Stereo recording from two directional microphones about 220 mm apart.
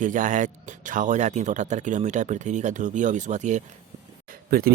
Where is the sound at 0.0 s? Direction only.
35° right (ahead or behind).